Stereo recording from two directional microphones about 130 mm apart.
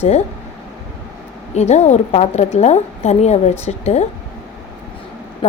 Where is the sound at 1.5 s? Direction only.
60° left (ahead or behind).